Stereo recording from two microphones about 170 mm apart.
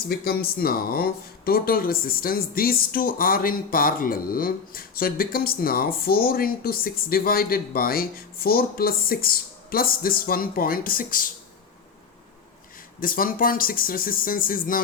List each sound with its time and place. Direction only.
0.1 s speech: 65° left (ahead or behind)
13.0 s speech: 55° left (ahead or behind)